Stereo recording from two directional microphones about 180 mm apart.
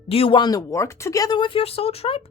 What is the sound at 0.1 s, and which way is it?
Speech, 30° left (ahead or behind).